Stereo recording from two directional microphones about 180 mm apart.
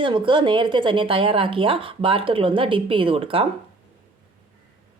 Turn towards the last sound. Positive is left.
turn(degrees=-30)  # may be behind; listen again after turning